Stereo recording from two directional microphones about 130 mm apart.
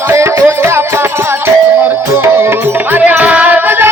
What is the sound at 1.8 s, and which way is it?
Music, 20° right (ahead or behind).